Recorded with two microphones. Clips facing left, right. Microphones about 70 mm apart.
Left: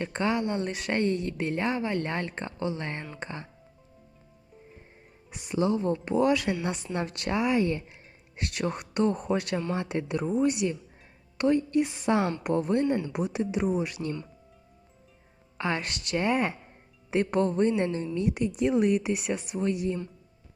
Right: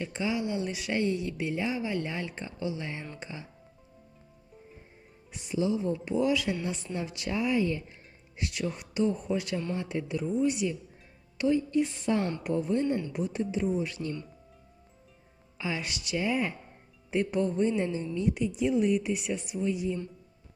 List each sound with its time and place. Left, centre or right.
0.0 s a woman's voice: left
5.3 s speech: left
9.7 s speech: left
12.4 s speech: left
15.5 s speech: left